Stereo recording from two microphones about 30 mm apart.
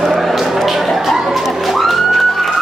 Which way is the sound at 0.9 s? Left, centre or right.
Centre.